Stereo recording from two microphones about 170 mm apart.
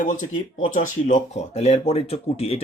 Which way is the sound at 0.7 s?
45° left (ahead or behind).